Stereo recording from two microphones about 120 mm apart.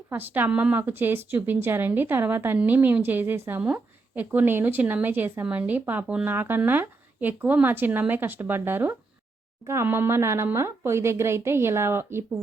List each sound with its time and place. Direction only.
0.1 s speech: 15° right (ahead or behind)